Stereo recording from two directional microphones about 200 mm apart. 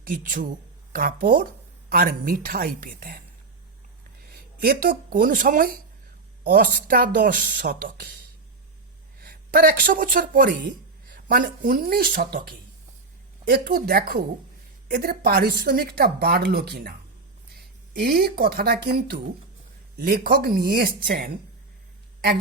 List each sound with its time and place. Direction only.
0.0 s a woman's voice: 45° right (ahead or behind)
4.6 s a woman's voice: 45° right (ahead or behind)
9.2 s a woman's voice: 50° right (ahead or behind)
17.9 s a woman's voice: 50° right (ahead or behind)